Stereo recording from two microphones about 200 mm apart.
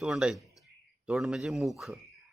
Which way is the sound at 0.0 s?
5° right (ahead or behind).